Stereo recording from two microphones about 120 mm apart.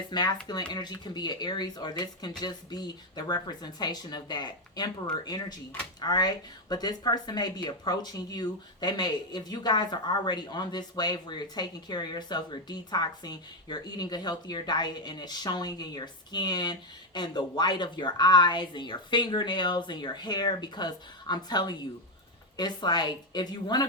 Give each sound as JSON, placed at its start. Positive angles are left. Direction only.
{"t": 0.1, "sound": "speech", "side_deg": 40}